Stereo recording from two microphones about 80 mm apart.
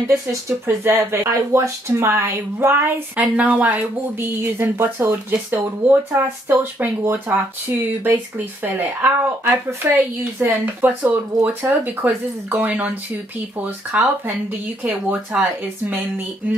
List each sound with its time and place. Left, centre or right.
0.3 s speech: right
3.2 s speech: centre
4.2 s speech: right